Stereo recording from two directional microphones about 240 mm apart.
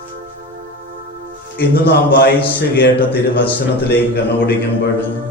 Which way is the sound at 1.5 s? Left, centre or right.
Left.